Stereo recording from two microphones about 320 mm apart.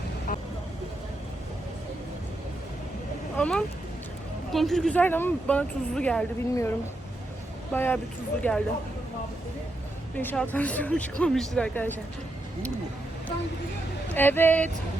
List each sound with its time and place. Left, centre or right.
0.3 s speech: left
3.3 s speech: centre
10.2 s speech: centre
14.1 s speech: centre